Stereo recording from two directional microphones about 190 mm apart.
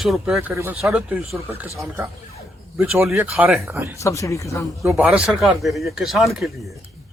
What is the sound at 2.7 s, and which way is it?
Speech, centre (ahead or behind).